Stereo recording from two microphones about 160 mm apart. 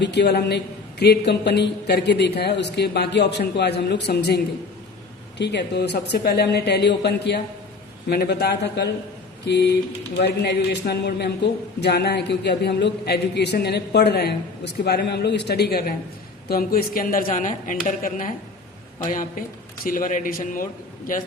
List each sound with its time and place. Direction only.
0.0 s a man's voice: 90° left
5.4 s a man's voice: 90° left; by 20.7 s 60° left (ahead or behind)